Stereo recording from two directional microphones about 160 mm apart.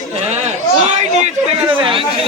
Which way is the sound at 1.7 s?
30° right (ahead or behind).